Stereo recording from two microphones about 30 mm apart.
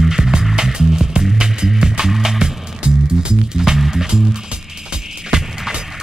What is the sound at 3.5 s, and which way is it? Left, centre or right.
Music, centre.